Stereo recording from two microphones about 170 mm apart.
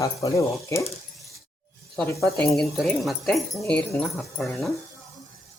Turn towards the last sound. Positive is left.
turn(degrees=5)  # may be behind; listen again after turning